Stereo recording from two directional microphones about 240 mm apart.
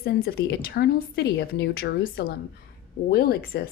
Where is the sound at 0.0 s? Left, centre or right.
Left.